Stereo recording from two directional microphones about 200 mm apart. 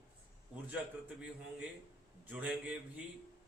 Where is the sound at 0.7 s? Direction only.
5° right (ahead or behind).